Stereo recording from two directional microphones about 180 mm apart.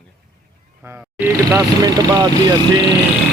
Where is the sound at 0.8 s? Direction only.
10° right (ahead or behind).